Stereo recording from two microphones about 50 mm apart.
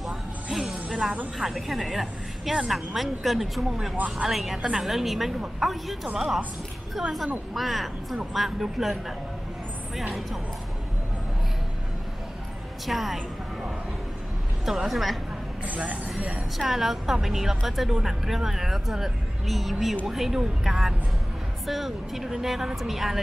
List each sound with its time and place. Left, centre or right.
0.0 s music: centre
1.4 s a woman's voice: centre
12.8 s a woman's voice: centre
14.6 s a woman's voice: centre
15.6 s speech: right
16.5 s a woman's voice: centre